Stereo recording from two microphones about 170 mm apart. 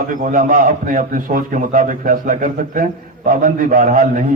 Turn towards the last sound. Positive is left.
turn(degrees=-50)  # may be behind; listen again after turning